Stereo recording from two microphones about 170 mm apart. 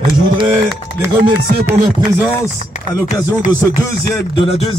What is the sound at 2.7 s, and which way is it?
A man's voice, 45° left (ahead or behind).